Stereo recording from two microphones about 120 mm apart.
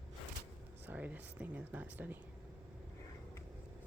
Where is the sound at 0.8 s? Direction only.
15° right (ahead or behind).